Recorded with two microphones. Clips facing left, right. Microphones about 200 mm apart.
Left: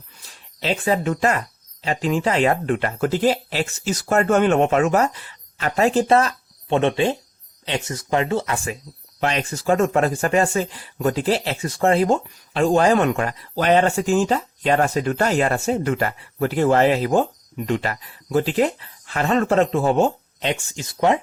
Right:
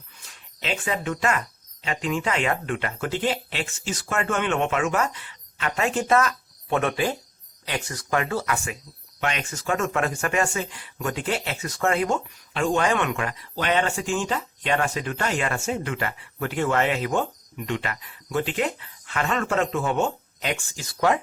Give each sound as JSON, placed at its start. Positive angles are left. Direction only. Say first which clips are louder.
{"t": 0.6, "sound": "speech", "louder": "left 7 dB", "side_deg": 35}